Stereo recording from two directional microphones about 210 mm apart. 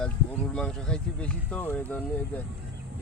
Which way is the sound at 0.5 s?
5° left (ahead or behind).